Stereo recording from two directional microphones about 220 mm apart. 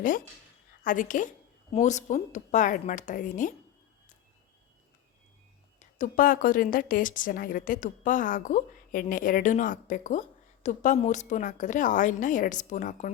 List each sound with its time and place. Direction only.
0.9 s a woman's voice: 35° left (ahead or behind)
6.0 s a woman's voice: 40° left (ahead or behind)